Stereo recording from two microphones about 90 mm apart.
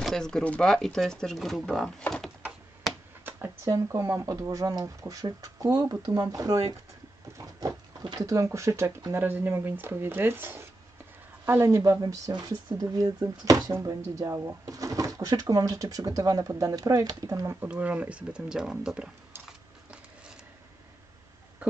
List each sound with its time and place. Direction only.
0.0 s speech: 5° left (ahead or behind)
3.3 s speech: 25° right (ahead or behind)
8.2 s speech: 35° right (ahead or behind)
12.3 s speech: 50° right (ahead or behind)
17.6 s speech: 15° right (ahead or behind)
19.4 s a sound: 10° right (ahead or behind)